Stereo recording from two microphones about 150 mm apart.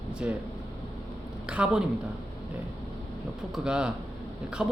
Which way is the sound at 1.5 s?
5° right (ahead or behind).